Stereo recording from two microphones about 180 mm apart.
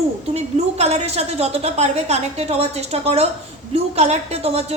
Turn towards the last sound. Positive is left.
turn(degrees=-35)  # may be behind; listen again after turning